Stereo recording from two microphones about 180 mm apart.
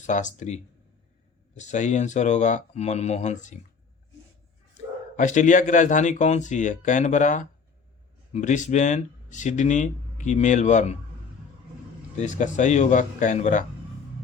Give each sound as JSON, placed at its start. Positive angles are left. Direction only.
{"t": 0.0, "sound": "speech", "side_deg": 45}
{"t": 5.1, "sound": "speech", "side_deg": 45}
{"t": 12.1, "sound": "speech", "side_deg": 45}